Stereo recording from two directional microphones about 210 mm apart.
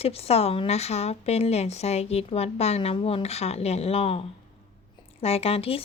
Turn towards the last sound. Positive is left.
turn(degrees=30)  # may be behind; listen again after turning